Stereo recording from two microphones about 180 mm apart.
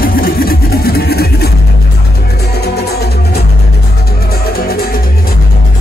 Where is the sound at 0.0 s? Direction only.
55° left (ahead or behind).